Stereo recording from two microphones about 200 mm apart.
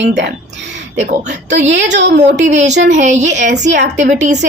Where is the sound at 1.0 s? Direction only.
35° right (ahead or behind).